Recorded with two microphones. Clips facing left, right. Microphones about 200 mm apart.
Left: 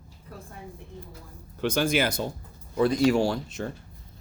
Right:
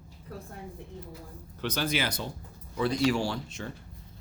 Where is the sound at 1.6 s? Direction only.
50° left (ahead or behind).